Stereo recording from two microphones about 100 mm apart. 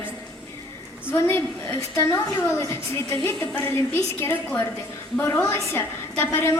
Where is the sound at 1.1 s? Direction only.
20° left (ahead or behind).